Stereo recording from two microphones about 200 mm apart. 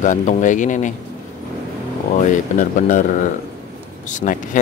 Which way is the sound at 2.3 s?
40° left (ahead or behind).